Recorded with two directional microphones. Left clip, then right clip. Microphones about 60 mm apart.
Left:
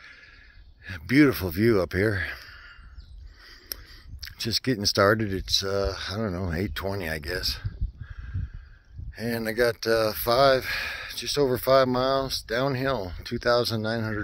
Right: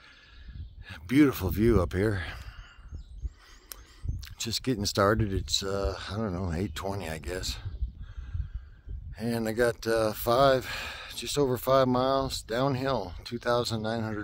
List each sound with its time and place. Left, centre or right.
0.8 s speech: right
2.3 s a sound: right; by 5.7 s centre
5.7 s speech: centre
6.7 s speech: centre
7.1 s speech: centre
9.6 s speech: centre
12.3 s speech: right